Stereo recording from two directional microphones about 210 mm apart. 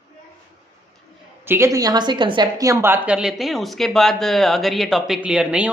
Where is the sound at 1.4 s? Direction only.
10° right (ahead or behind).